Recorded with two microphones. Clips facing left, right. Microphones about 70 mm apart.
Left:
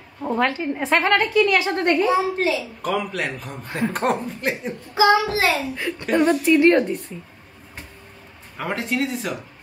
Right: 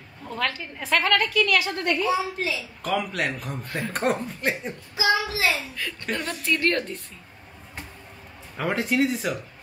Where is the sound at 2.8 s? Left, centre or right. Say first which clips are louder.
Left 2 dB; centre.